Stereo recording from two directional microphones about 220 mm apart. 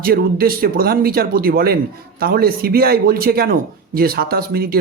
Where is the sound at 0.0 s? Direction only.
40° right (ahead or behind).